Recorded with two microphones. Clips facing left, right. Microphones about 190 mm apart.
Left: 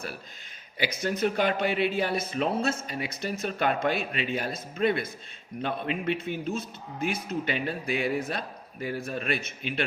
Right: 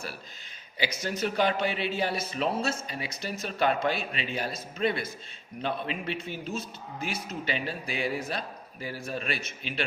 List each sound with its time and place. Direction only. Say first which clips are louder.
0.8 s a man's voice: left 3 dB; 55° left (ahead or behind)